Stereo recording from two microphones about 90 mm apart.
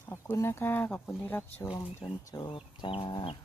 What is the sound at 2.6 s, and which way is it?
Chicken, 80° left.